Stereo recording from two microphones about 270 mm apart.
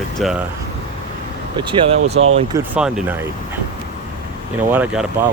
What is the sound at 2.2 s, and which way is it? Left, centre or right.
Speech, right.